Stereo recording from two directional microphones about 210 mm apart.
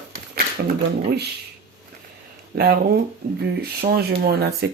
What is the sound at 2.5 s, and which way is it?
Speech, 50° right (ahead or behind).